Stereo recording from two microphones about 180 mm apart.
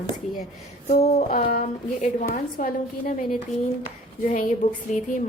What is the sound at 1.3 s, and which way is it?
A woman's voice, 55° left (ahead or behind).